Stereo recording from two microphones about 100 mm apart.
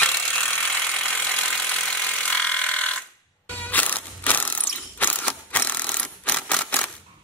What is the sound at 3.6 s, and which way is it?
Mechanisms, 15° left (ahead or behind).